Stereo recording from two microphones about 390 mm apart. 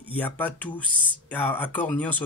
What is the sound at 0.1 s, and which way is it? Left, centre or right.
Speech, centre.